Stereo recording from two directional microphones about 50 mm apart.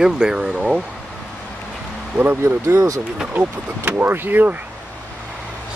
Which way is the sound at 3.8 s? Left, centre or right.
Right.